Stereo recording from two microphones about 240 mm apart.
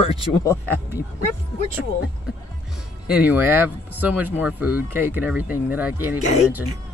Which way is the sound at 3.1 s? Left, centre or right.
Centre.